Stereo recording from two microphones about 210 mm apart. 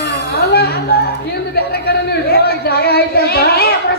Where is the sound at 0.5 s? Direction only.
45° left (ahead or behind).